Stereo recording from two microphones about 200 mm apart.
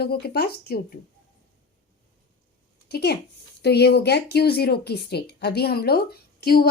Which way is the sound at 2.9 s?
55° left (ahead or behind).